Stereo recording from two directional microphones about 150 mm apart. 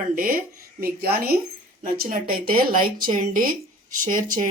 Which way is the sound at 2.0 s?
70° right (ahead or behind).